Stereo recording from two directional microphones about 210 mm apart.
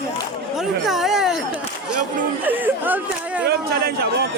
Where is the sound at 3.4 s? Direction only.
50° right (ahead or behind).